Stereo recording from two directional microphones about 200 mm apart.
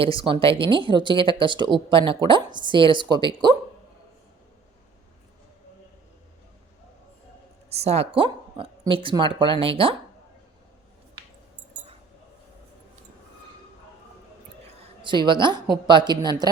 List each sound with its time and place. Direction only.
0.0 s speech: 25° right (ahead or behind)
7.7 s speech: 30° right (ahead or behind)
15.0 s speech: 25° right (ahead or behind)